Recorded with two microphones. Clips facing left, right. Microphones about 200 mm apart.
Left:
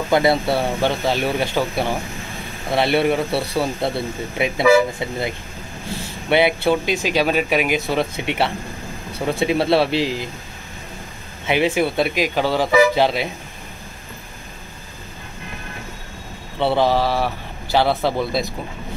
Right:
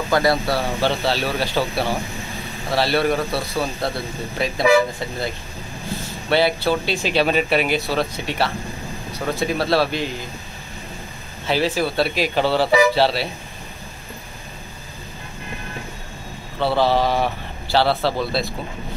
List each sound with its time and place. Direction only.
0.1 s speech: 20° left (ahead or behind)
3.3 s speech: 30° left (ahead or behind)
4.4 s speech: 15° left (ahead or behind)
9.8 s speech: 90° left
11.4 s speech: 15° left (ahead or behind)
16.5 s speech: 20° left (ahead or behind)